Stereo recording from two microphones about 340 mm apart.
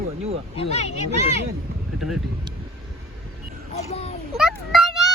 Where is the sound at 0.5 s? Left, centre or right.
Centre.